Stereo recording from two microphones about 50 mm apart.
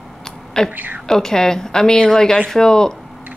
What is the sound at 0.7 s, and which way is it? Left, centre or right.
Speech, right.